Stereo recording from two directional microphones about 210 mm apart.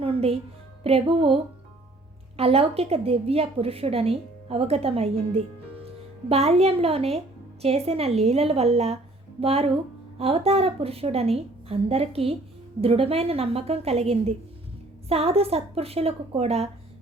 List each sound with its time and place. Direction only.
0.0 s music: 25° right (ahead or behind)
0.9 s a woman's voice: 25° right (ahead or behind)